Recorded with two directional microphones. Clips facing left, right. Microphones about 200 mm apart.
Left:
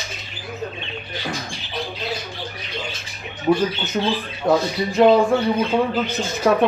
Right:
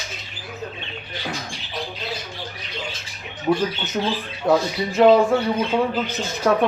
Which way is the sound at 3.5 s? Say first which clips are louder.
Left 2 dB; 10° left (ahead or behind).